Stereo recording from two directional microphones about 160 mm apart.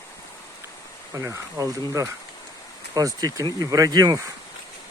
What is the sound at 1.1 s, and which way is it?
Speech, 20° right (ahead or behind).